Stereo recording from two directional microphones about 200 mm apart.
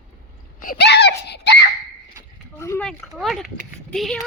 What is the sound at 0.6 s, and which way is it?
Speech, 55° left (ahead or behind).